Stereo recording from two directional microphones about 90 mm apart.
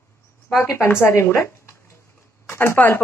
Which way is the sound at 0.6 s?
30° left (ahead or behind).